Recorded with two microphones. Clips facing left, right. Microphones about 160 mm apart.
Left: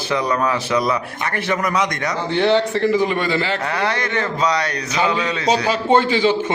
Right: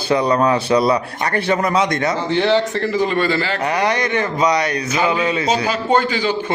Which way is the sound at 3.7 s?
15° right (ahead or behind).